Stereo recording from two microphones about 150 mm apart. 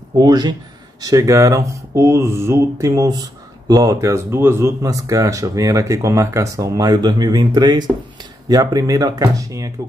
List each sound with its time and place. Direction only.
0.2 s speech: 25° right (ahead or behind)